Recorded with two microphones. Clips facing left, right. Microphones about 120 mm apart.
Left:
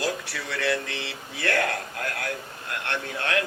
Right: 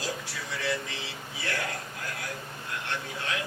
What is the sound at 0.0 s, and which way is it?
Speech, 65° left (ahead or behind).